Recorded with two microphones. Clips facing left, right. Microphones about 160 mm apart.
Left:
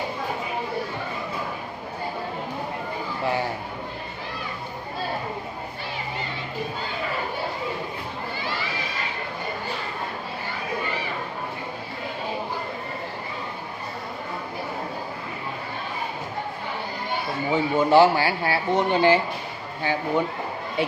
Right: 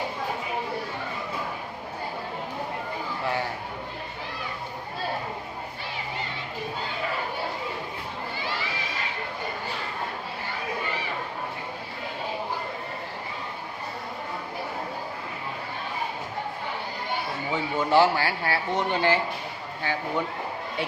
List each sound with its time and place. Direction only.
17.5 s speech: 15° left (ahead or behind)